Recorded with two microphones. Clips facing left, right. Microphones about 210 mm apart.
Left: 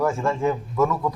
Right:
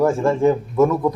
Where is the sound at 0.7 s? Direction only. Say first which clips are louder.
Right 6 dB; 20° right (ahead or behind).